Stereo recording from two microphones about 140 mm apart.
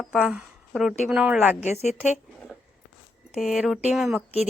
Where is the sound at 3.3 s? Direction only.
Centre (ahead or behind).